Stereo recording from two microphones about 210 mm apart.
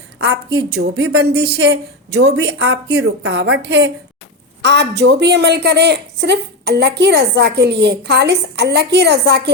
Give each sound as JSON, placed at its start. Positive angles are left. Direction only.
{"t": 0.2, "sound": "a woman's voice", "side_deg": -55}